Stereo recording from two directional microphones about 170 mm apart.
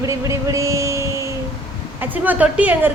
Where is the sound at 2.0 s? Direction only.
10° right (ahead or behind).